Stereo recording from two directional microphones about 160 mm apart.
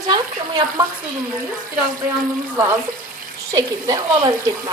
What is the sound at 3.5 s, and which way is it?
Speech, 25° right (ahead or behind).